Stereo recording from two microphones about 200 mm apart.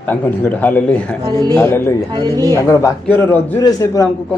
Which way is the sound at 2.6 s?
15° left (ahead or behind).